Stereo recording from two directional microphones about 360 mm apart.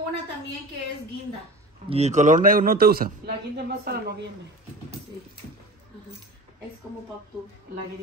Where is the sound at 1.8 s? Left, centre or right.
Centre.